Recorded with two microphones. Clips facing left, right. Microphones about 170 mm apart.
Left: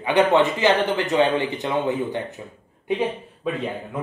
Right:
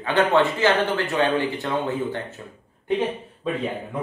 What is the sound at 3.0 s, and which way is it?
A man's voice, 5° left (ahead or behind).